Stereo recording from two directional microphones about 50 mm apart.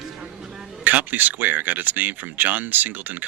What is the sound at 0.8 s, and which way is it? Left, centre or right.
Speech, right.